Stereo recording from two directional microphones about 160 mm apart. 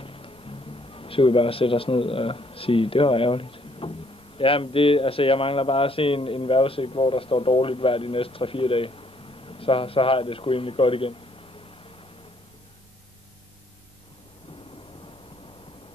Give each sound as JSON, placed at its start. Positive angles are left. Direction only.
{"t": 0.0, "sound": "speech", "side_deg": 35}